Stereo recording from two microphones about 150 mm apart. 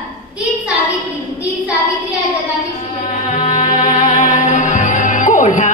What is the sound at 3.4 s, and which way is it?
Music, 60° left (ahead or behind).